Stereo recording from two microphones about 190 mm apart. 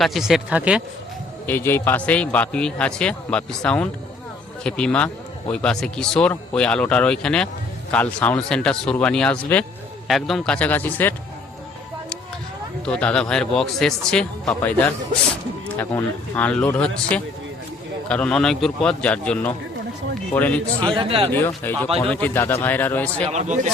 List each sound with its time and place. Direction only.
0.0 s a man's voice: centre (ahead or behind)
1.5 s a man's voice: 10° left (ahead or behind)
12.8 s a man's voice: 5° left (ahead or behind)
20.8 s speech: 25° right (ahead or behind)
21.3 s a man's voice: 10° left (ahead or behind)
21.8 s speech: 30° right (ahead or behind)
22.1 s a man's voice: 10° left (ahead or behind)
23.3 s speech: 40° right (ahead or behind)